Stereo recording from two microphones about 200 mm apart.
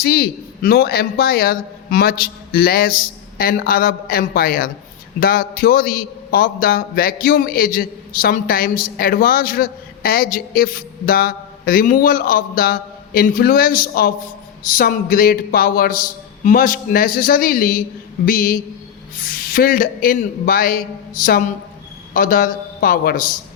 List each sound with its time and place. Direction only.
0.0 s a man's voice: 50° left (ahead or behind)